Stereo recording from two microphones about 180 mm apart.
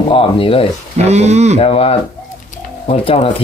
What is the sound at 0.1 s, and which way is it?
Speech, 30° left (ahead or behind).